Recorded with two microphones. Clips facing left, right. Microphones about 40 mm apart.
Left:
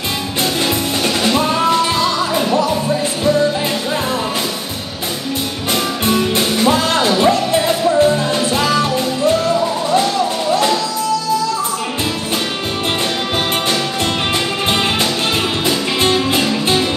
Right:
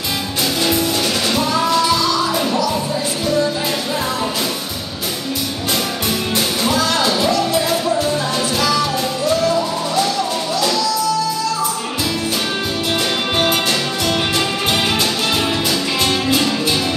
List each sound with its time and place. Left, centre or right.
0.7 s music: left
6.6 s music: left
10.5 s music: left
16.3 s music: left